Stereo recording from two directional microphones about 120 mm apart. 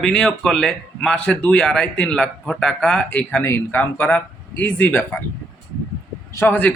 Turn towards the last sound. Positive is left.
turn(degrees=15)  # may be behind; listen again after turning